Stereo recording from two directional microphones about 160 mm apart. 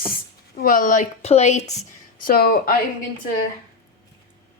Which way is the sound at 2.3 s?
70° left (ahead or behind).